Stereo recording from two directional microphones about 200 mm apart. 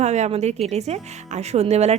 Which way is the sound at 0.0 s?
35° right (ahead or behind).